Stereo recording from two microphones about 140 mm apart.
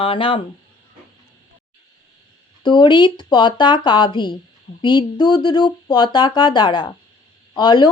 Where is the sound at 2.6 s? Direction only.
35° left (ahead or behind).